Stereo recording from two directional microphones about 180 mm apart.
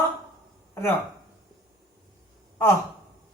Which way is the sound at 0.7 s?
15° left (ahead or behind).